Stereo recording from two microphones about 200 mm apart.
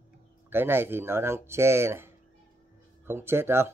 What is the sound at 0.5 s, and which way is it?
A man's voice, 10° right (ahead or behind).